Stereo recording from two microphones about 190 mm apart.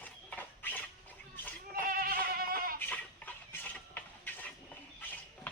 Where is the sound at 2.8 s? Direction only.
10° left (ahead or behind).